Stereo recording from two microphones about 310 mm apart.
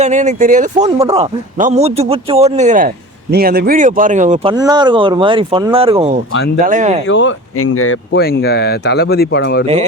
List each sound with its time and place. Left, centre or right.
0.0 s speech: right
0.9 s speech: centre
4.5 s speech: centre
7.1 s speech: left